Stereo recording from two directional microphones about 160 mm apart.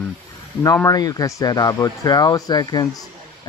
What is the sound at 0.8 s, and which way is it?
Speech, 25° left (ahead or behind).